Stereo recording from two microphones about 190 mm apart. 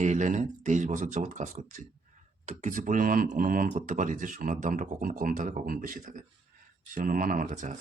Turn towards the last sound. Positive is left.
turn(degrees=-45)  # may be behind; listen again after turning